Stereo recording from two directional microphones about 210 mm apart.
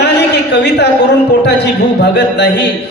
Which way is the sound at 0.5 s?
55° left (ahead or behind).